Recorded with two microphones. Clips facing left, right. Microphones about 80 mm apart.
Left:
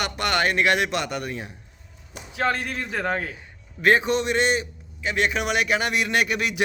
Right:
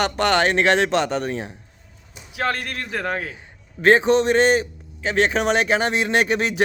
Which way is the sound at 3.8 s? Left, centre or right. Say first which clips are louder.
Right 5 dB; right.